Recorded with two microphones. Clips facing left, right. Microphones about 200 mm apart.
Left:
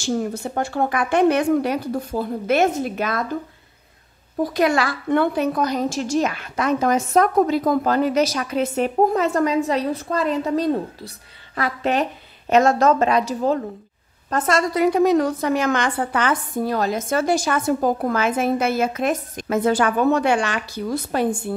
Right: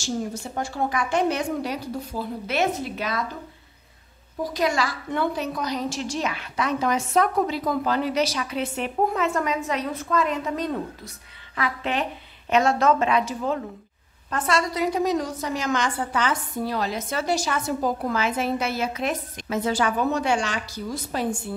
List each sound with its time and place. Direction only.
0.0 s a woman's voice: 60° left (ahead or behind)
4.4 s a woman's voice: 60° left (ahead or behind)